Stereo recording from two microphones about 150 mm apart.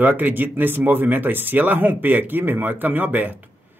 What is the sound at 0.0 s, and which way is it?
Speech, 10° right (ahead or behind).